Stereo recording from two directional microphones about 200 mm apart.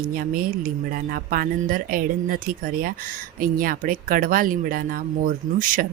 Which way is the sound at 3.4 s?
45° right (ahead or behind).